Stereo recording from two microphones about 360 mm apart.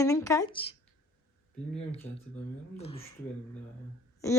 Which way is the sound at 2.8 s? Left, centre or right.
Centre.